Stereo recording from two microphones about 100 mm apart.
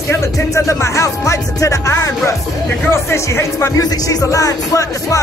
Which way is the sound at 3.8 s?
40° left (ahead or behind).